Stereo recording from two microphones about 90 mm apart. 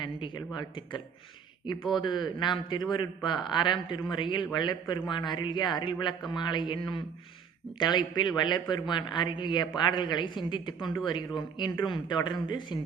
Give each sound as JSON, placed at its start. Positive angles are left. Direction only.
{"t": 0.0, "sound": "speech", "side_deg": 55}
{"t": 2.0, "sound": "a man's voice", "side_deg": 55}